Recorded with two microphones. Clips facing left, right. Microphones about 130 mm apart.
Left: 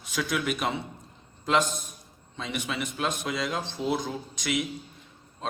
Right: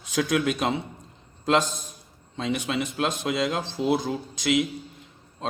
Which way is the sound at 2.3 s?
30° right (ahead or behind).